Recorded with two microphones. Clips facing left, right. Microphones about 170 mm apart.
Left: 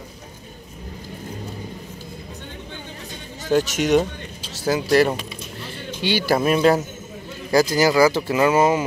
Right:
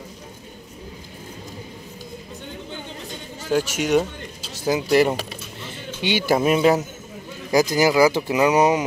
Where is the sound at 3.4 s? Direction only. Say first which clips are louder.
Left 2 dB; 10° right (ahead or behind).